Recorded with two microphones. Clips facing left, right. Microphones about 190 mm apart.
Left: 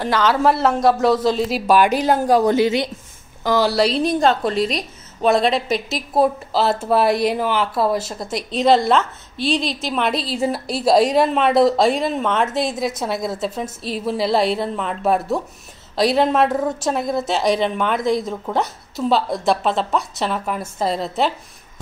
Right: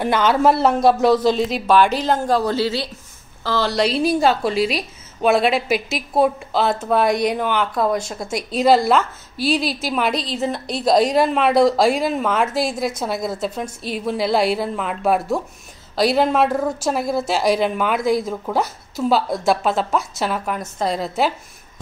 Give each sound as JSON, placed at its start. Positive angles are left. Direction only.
{"t": 0.0, "sound": "speech", "side_deg": -20}
{"t": 1.1, "sound": "a woman's voice", "side_deg": 0}
{"t": 3.7, "sound": "a woman's voice", "side_deg": 0}